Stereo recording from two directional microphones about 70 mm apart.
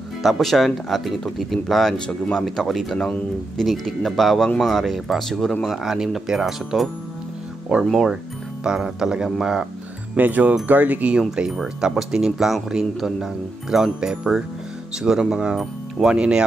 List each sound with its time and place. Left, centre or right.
0.2 s speech: centre
5.8 s speech: centre
10.1 s speech: right
11.1 s speech: centre